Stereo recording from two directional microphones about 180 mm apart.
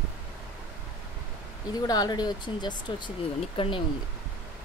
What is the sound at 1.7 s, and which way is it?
Speech, 20° left (ahead or behind).